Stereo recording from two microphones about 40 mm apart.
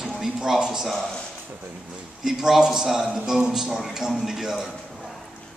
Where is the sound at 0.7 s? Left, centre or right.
Centre.